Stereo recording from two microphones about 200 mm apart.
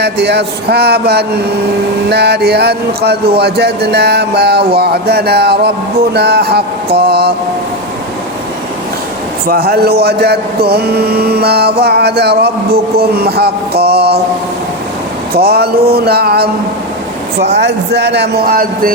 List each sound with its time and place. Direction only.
0.0 s speech: 55° right (ahead or behind)
9.5 s speech: 50° right (ahead or behind)
15.3 s speech: 50° right (ahead or behind)